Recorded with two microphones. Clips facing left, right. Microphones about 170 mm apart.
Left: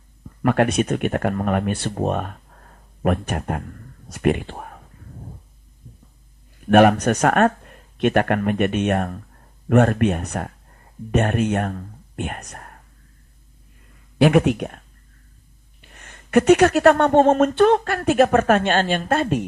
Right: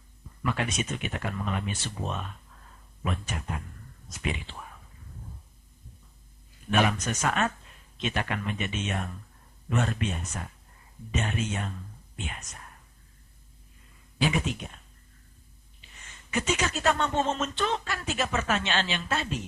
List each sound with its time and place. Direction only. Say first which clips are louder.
0.4 s speech: left 12 dB; 60° left (ahead or behind)
6.7 s speech: left 12 dB; 60° left (ahead or behind)
14.2 s speech: left 13 dB; 65° left (ahead or behind)
15.8 s speech: left 7 dB; 60° left (ahead or behind)